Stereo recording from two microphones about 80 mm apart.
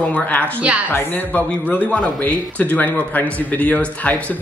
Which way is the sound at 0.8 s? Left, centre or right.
Left.